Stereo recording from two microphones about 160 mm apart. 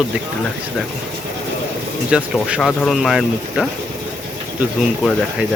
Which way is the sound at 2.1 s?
5° right (ahead or behind).